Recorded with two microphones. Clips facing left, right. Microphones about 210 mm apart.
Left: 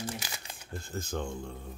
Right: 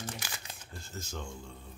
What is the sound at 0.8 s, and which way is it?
Speech, 55° left (ahead or behind).